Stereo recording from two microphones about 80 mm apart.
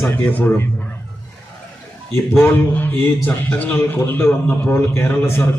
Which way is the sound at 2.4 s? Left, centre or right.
Left.